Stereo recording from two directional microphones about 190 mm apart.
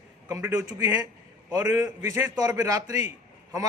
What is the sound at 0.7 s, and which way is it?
A man's voice, 20° right (ahead or behind).